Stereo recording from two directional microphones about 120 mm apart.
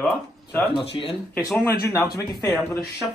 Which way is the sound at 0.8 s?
50° left (ahead or behind).